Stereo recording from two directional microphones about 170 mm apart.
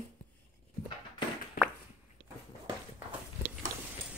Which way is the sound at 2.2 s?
15° right (ahead or behind).